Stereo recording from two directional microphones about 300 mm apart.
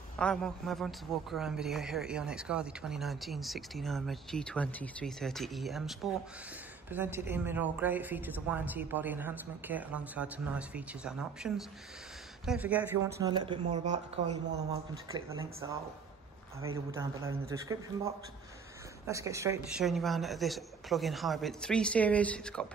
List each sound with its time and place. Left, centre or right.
0.2 s a man's voice: centre
15.6 s a man's voice: centre